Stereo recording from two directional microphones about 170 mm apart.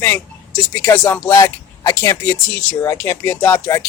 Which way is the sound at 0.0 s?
15° left (ahead or behind).